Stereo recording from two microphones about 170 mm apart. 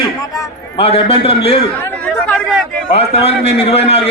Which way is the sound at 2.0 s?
10° left (ahead or behind).